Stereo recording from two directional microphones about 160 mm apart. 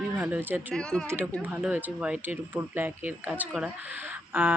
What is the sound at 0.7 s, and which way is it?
Speech, 5° left (ahead or behind).